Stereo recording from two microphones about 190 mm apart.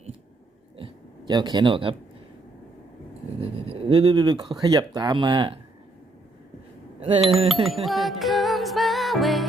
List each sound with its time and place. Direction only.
1.3 s speech: 25° right (ahead or behind)
3.4 s speech: 30° right (ahead or behind)
7.4 s speech: centre (ahead or behind)
7.9 s music: centre (ahead or behind)